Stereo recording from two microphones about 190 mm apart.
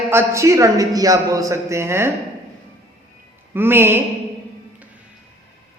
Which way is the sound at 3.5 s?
10° right (ahead or behind).